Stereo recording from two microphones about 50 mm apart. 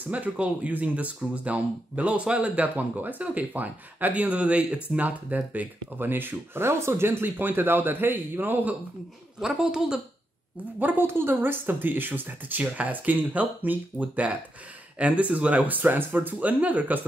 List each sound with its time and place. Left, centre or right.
0.0 s speech: right
5.9 s speech: right
9.4 s a woman's voice: centre
10.8 s speech: right
11.1 s speech: right